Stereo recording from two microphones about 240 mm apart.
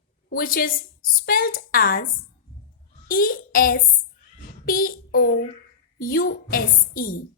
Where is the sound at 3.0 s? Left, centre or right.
Left.